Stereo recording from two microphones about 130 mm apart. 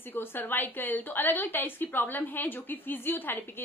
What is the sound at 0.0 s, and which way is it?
A woman's voice, 15° left (ahead or behind).